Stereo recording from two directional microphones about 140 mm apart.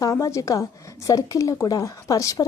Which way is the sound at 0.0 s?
20° left (ahead or behind).